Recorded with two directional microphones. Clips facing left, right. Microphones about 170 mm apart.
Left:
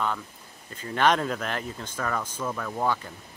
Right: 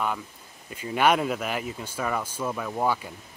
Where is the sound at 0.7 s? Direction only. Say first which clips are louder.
Right 1 dB; 10° right (ahead or behind).